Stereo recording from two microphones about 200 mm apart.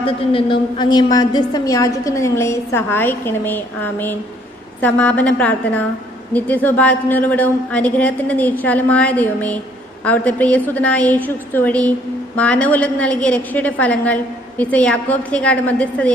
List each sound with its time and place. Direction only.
0.0 s a woman's voice: 25° left (ahead or behind); by 16.1 s 5° left (ahead or behind)